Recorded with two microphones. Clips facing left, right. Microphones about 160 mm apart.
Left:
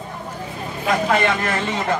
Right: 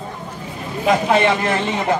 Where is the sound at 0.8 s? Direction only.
20° right (ahead or behind).